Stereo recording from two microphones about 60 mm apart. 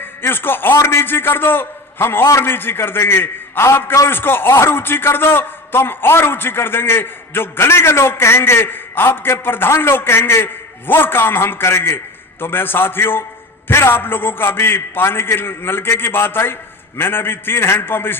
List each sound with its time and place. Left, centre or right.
0.2 s a man's voice: left